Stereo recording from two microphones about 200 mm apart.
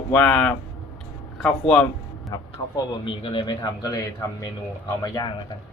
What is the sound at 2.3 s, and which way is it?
A man's voice, 15° left (ahead or behind).